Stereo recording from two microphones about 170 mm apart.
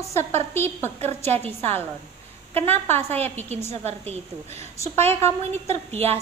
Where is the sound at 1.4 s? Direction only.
35° right (ahead or behind).